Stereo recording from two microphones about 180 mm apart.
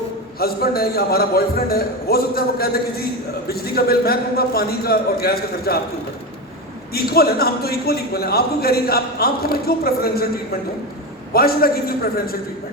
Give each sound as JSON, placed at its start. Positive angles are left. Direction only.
{"t": 0.3, "sound": "a man's voice", "side_deg": 60}
{"t": 6.9, "sound": "a man's voice", "side_deg": 60}
{"t": 11.3, "sound": "a man's voice", "side_deg": 55}